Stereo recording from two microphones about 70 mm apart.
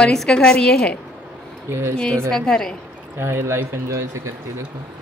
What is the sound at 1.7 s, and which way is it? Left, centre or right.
Speech, right.